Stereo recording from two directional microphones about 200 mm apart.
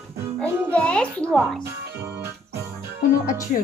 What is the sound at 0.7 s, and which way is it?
Speech, 5° left (ahead or behind).